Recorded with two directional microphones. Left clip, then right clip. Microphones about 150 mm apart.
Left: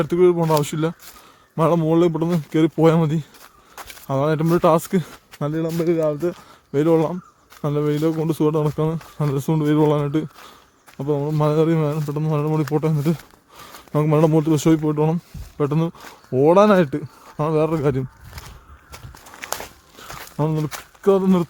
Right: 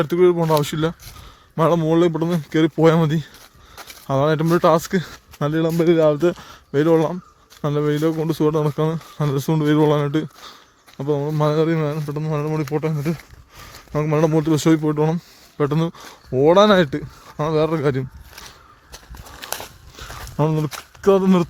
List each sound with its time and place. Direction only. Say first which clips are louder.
0.0 s speech: even; 5° left (ahead or behind)
5.7 s speech: right 5 dB; 30° right (ahead or behind)
6.3 s speech: right 1 dB; centre (ahead or behind); by 14.4 s 20° left (ahead or behind)
14.4 s speech: right 1 dB; 5° left (ahead or behind)
19.5 s a sound: left 1 dB; 10° right (ahead or behind)